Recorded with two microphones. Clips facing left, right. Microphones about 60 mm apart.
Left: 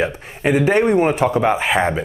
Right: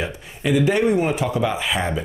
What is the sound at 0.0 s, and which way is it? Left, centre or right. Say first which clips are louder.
Speech: left 6 dB; left.